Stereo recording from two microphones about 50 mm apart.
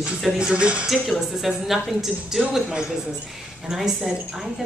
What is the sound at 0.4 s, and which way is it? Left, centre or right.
Music, centre.